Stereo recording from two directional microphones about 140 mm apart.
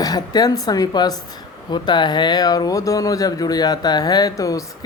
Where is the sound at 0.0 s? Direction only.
30° left (ahead or behind).